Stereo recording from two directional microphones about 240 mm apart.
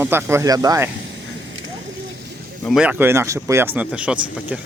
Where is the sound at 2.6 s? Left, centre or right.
Centre.